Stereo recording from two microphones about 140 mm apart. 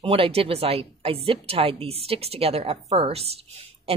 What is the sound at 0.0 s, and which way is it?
A woman's voice, 40° right (ahead or behind).